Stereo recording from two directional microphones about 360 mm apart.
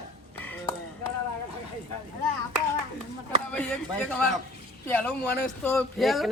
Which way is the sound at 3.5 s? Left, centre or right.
Centre.